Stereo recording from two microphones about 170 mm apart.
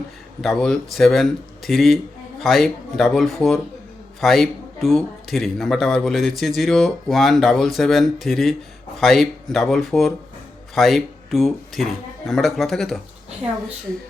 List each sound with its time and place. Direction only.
0.4 s speech: 5° left (ahead or behind)